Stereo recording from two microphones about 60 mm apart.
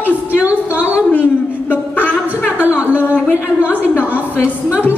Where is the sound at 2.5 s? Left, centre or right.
Right.